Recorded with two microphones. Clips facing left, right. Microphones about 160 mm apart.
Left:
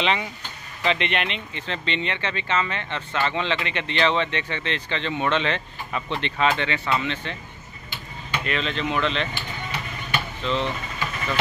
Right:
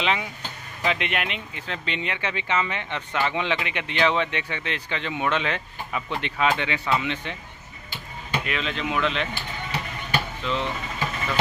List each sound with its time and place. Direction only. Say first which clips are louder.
0.0 s speech: left 1 dB; 5° right (ahead or behind)
8.5 s speech: left 4 dB; 10° right (ahead or behind)
10.4 s speech: left 5 dB; 10° right (ahead or behind)